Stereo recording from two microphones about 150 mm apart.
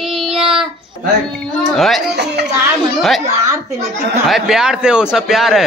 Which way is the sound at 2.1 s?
90° right.